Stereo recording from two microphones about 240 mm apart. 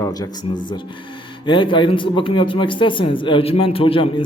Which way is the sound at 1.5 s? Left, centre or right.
Centre.